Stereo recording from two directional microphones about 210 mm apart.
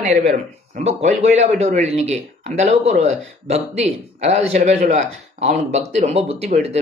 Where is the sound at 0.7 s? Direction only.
35° right (ahead or behind).